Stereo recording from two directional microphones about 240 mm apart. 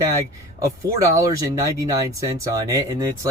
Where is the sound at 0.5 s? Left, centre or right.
Centre.